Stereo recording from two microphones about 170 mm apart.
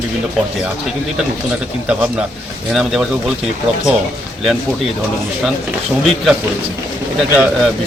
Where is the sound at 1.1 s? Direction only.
5° right (ahead or behind).